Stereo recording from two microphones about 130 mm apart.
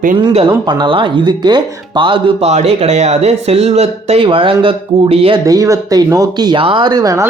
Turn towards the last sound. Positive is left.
turn(degrees=-25)  # may be behind; listen again after turning